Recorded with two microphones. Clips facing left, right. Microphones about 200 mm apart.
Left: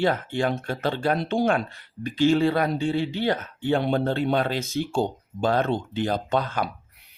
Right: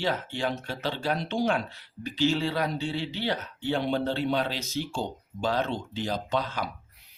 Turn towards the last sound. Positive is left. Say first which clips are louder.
# left 4 dB
turn(degrees=50)  # may be behind; listen again after turning